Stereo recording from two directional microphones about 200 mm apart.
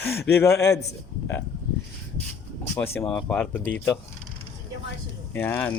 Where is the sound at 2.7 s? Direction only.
10° left (ahead or behind).